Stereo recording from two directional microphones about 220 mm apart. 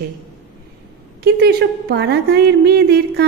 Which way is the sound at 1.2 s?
45° right (ahead or behind).